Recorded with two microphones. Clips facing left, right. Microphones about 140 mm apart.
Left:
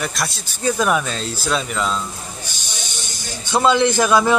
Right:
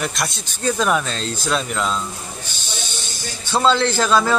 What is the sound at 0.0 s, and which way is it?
Speech, centre (ahead or behind).